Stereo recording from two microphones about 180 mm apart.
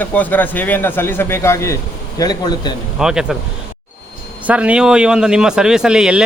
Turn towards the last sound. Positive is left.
turn(degrees=-5)  # may be behind; listen again after turning